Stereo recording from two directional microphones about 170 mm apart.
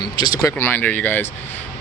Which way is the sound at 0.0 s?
20° left (ahead or behind).